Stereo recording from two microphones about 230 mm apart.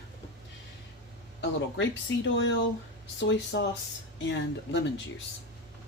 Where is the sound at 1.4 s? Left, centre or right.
Left.